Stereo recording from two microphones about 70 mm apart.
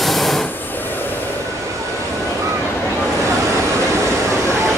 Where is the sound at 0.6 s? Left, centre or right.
Left.